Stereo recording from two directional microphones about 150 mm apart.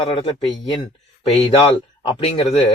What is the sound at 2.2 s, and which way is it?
Speech, 40° left (ahead or behind).